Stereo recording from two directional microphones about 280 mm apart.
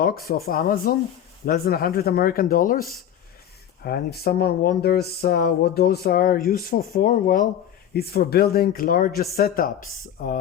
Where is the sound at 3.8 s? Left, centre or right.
Left.